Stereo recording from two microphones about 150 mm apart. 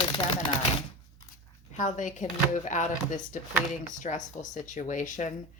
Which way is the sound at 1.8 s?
55° left (ahead or behind).